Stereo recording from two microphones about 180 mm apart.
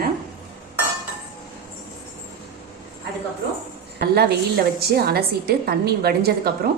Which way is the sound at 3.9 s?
60° right (ahead or behind).